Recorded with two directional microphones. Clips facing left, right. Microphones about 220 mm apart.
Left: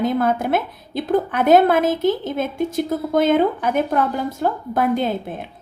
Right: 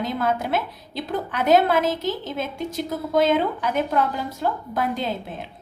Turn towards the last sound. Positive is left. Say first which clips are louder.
# left 6 dB
turn(degrees=55)  # may be behind; listen again after turning